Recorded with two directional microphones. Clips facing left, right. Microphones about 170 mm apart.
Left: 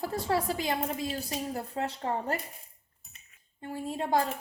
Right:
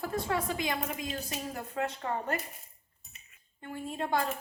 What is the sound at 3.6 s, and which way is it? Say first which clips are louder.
Speech: left 2 dB; 30° left (ahead or behind).